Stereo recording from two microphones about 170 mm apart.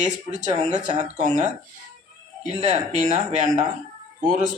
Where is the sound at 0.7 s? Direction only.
45° right (ahead or behind).